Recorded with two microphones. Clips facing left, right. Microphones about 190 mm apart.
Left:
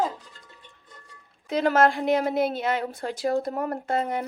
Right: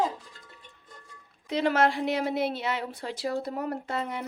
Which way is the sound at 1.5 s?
45° left (ahead or behind).